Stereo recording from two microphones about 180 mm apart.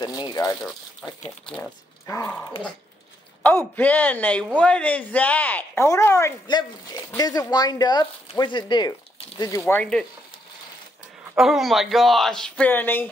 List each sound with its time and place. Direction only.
0.0 s speech: 25° left (ahead or behind)
3.4 s speech: 10° left (ahead or behind)
9.7 s speech: 5° left (ahead or behind)
11.3 s speech: centre (ahead or behind)